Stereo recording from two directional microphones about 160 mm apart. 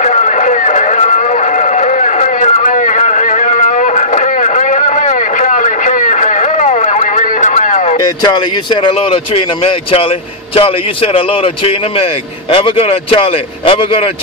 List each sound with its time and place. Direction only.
0.0 s music: 50° left (ahead or behind)
8.2 s speech: 30° left (ahead or behind)